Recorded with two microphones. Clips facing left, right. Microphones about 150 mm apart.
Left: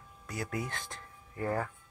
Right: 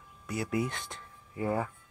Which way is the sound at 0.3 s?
20° right (ahead or behind).